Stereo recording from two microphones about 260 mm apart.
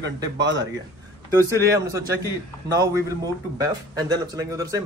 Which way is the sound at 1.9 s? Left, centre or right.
Centre.